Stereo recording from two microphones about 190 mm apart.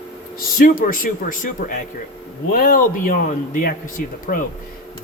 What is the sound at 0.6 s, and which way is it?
Speech, 45° left (ahead or behind).